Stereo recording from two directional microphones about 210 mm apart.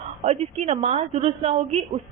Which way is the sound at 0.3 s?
30° right (ahead or behind).